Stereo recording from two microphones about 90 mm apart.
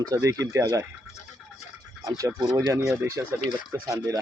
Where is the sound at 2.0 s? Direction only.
35° right (ahead or behind).